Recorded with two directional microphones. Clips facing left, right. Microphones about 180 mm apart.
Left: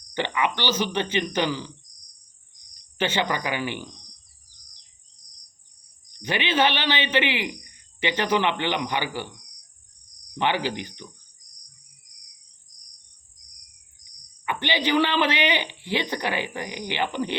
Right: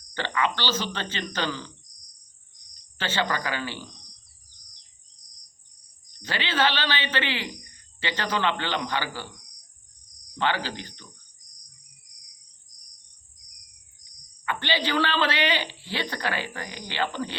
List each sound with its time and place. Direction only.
0.1 s speech: 15° left (ahead or behind)
3.0 s speech: 15° left (ahead or behind)
6.1 s speech: 20° left (ahead or behind)
10.3 s speech: 15° left (ahead or behind)
14.0 s a man's voice: 15° left (ahead or behind)